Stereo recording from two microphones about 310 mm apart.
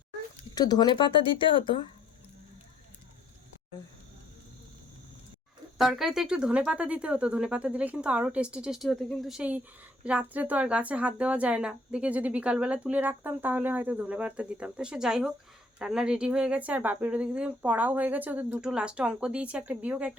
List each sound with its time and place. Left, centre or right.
0.5 s speech: centre
5.7 s speech: centre